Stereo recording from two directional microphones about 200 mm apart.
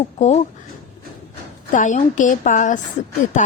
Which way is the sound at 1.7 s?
40° left (ahead or behind).